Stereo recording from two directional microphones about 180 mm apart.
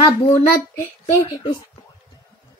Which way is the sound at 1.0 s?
25° left (ahead or behind).